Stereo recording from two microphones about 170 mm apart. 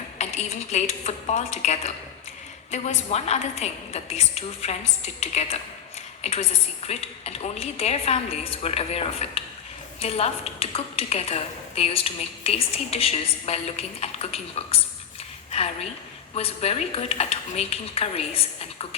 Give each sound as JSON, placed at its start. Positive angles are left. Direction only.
{"t": 0.2, "sound": "a woman's voice", "side_deg": 40}